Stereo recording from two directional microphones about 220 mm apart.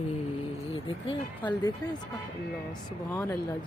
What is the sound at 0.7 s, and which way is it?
Speech, 20° left (ahead or behind).